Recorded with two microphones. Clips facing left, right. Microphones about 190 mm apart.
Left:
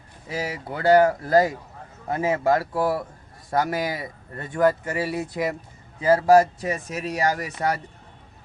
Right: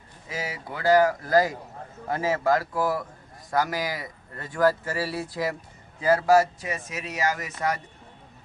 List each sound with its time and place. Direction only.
0.3 s a man's voice: 35° left (ahead or behind)
6.6 s speech: 35° left (ahead or behind)